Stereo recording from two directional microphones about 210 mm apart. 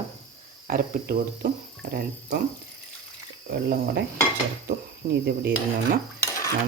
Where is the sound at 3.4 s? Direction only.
45° right (ahead or behind).